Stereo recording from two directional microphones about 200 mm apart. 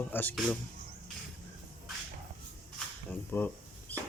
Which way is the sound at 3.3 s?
10° left (ahead or behind).